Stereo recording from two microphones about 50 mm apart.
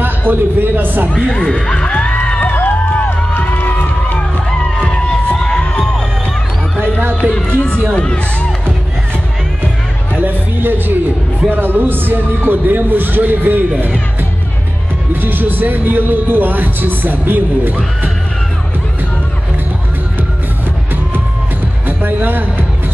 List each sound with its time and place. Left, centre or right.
0.3 s speech: right
1.1 s speech: centre
1.8 s music: left
2.4 s music: left
4.5 s music: centre
7.9 s speech: centre
10.2 s music: right
11.4 s speech: right
15.2 s speech: right
21.8 s music: right